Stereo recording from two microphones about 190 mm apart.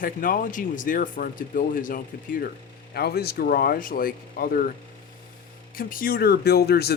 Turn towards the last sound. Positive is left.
turn(degrees=55)  # may be behind; listen again after turning